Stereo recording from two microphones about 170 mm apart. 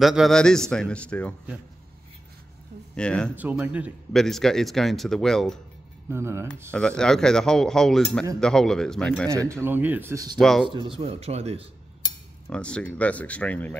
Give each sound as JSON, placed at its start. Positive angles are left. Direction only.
{"t": 0.0, "sound": "speech", "side_deg": 0}
{"t": 3.0, "sound": "speech", "side_deg": 5}
{"t": 3.3, "sound": "speech", "side_deg": -10}
{"t": 6.0, "sound": "speech", "side_deg": -15}
{"t": 6.7, "sound": "speech", "side_deg": 5}
{"t": 9.4, "sound": "speech", "side_deg": -15}
{"t": 10.4, "sound": "speech", "side_deg": 0}
{"t": 10.7, "sound": "speech", "side_deg": -30}
{"t": 12.4, "sound": "speech", "side_deg": 5}